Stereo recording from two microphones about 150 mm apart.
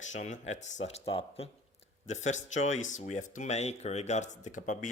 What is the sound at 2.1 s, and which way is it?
Speech, 55° left (ahead or behind).